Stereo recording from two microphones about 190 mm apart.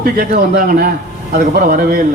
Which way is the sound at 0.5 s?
50° right (ahead or behind).